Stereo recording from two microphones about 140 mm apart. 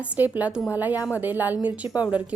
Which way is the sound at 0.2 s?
10° right (ahead or behind).